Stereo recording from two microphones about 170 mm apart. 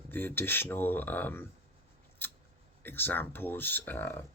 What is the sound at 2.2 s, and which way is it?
Scissors, 10° left (ahead or behind).